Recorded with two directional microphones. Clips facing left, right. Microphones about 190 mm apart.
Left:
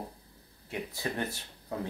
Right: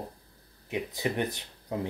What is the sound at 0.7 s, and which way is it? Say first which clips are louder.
Speech: right 5 dB; 20° right (ahead or behind).